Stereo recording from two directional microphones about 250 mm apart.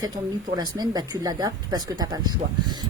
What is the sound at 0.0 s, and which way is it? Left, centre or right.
Speech, centre.